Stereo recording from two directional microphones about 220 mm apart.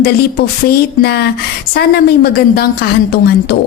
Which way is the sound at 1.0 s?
45° left (ahead or behind).